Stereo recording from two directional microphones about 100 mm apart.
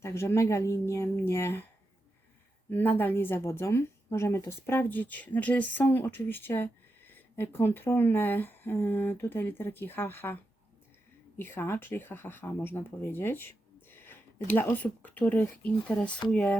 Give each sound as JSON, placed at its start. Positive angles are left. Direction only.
{"t": 0.0, "sound": "speech", "side_deg": 25}
{"t": 2.6, "sound": "speech", "side_deg": 20}